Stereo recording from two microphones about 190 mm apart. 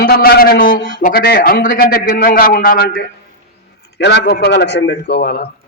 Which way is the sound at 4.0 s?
70° left (ahead or behind).